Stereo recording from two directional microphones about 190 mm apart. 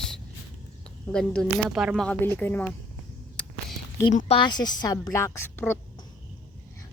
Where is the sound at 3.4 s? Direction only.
5° left (ahead or behind).